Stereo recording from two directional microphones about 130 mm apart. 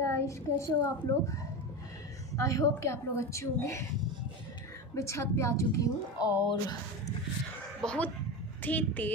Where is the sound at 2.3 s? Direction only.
25° left (ahead or behind).